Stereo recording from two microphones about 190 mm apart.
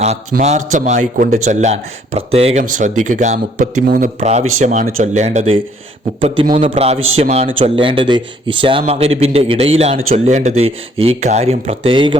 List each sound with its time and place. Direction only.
0.3 s a man's voice: 40° right (ahead or behind)